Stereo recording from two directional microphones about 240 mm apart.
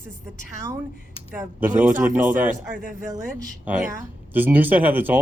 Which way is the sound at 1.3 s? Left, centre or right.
Centre.